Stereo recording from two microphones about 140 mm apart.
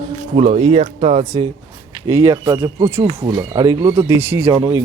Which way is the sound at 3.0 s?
40° right (ahead or behind).